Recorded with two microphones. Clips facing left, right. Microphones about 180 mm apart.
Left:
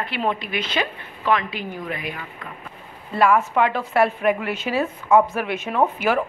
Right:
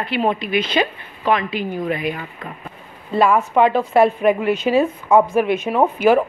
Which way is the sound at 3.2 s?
20° right (ahead or behind).